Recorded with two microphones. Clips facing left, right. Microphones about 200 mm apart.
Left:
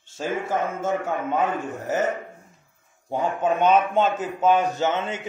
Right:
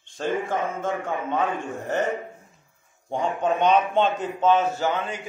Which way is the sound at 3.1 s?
5° left (ahead or behind).